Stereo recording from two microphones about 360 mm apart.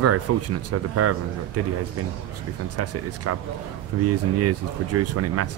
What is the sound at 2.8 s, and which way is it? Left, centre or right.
Speech, right.